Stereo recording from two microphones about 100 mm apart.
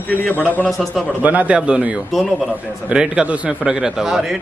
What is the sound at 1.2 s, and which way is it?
A man's voice, 15° right (ahead or behind).